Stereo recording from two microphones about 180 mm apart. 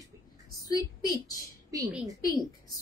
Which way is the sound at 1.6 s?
20° right (ahead or behind).